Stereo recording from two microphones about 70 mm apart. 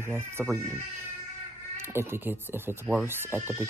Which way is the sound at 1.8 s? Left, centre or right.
Right.